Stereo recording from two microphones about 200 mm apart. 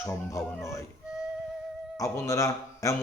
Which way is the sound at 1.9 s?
15° left (ahead or behind).